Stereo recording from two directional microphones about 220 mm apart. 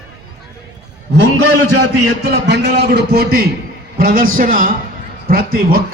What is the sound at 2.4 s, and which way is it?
A man's voice, 50° right (ahead or behind).